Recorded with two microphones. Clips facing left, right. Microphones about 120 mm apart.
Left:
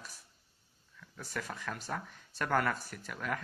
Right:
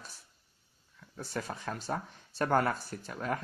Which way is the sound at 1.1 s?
30° right (ahead or behind).